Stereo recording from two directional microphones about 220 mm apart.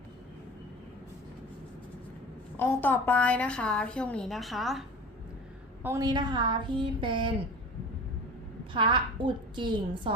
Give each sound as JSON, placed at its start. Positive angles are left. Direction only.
{"t": 2.6, "sound": "a woman's voice", "side_deg": 10}
{"t": 5.8, "sound": "a woman's voice", "side_deg": -15}
{"t": 8.7, "sound": "a woman's voice", "side_deg": -20}